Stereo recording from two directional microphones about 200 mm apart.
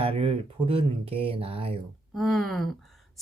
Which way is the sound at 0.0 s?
25° right (ahead or behind).